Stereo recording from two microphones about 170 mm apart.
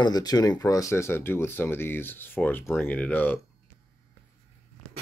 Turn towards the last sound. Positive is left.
turn(degrees=10)  # may be behind; listen again after turning